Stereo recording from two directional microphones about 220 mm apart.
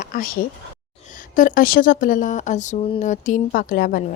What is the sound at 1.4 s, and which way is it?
Speech, 40° left (ahead or behind).